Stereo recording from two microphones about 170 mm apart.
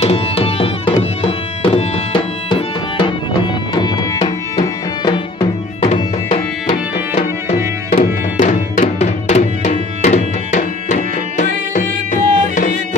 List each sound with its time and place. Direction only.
0.0 s tabla: 35° left (ahead or behind)
1.2 s music: 30° left (ahead or behind)
8.0 s music: 50° left (ahead or behind)